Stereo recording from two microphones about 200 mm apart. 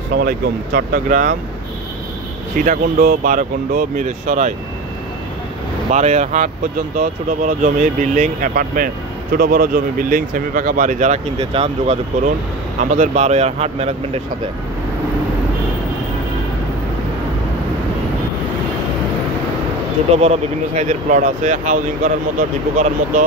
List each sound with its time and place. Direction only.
0.7 s speech: 40° right (ahead or behind)
2.5 s speech: 45° right (ahead or behind)
5.9 s speech: 35° right (ahead or behind)
20.2 s speech: 35° right (ahead or behind)